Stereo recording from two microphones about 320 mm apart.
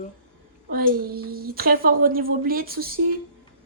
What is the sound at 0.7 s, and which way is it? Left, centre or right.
Speech, right.